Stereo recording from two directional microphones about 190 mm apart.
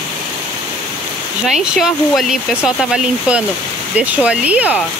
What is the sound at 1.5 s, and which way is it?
Speech, centre (ahead or behind).